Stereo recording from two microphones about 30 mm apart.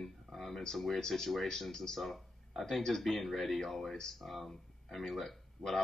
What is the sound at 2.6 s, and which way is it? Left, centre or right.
Speech, centre.